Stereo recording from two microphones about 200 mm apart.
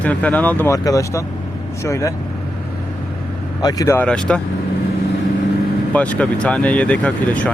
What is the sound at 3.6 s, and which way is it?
Speech, 20° left (ahead or behind).